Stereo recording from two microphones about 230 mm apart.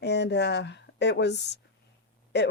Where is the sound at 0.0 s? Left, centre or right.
Left.